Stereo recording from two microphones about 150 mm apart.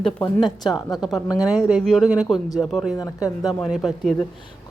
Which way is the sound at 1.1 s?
25° left (ahead or behind).